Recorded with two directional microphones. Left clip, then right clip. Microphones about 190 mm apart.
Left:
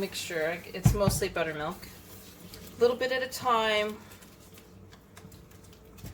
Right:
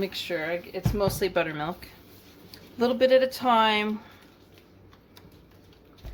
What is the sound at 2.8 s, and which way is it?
A woman's voice, 50° right (ahead or behind).